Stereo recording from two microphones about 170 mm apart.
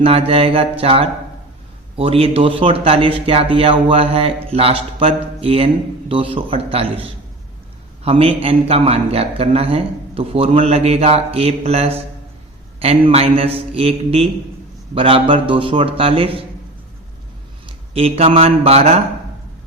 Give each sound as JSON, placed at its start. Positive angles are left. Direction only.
{"t": 0.0, "sound": "speech", "side_deg": -35}
{"t": 8.0, "sound": "speech", "side_deg": -35}
{"t": 13.1, "sound": "speech", "side_deg": -35}
{"t": 17.7, "sound": "a man's voice", "side_deg": -35}